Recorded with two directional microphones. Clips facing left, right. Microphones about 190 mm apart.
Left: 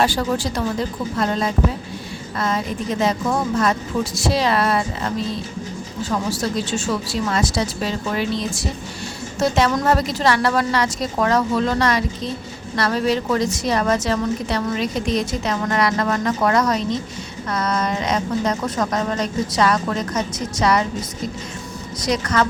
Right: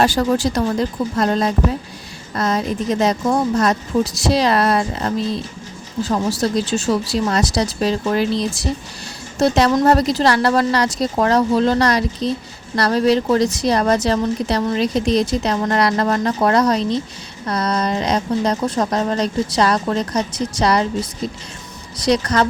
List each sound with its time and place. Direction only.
0.0 s a woman's voice: 45° right (ahead or behind)
22.0 s a woman's voice: 35° right (ahead or behind)